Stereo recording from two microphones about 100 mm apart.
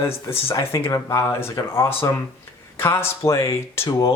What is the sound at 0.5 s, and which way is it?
Speech, 25° left (ahead or behind).